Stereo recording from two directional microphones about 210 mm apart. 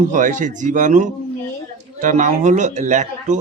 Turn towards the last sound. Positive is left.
turn(degrees=-35)  # may be behind; listen again after turning